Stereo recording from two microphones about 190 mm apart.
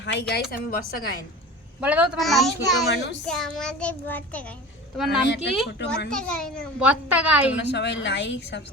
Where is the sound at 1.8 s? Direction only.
5° right (ahead or behind).